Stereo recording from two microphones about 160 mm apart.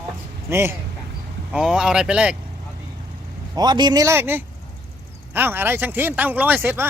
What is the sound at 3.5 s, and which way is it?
A man's voice, 25° right (ahead or behind).